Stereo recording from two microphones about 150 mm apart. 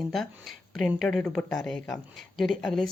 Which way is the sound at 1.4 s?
20° left (ahead or behind).